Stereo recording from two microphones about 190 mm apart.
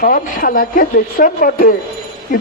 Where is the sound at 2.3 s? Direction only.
45° left (ahead or behind).